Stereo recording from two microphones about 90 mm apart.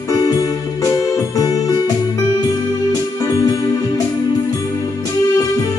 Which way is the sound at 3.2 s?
40° left (ahead or behind).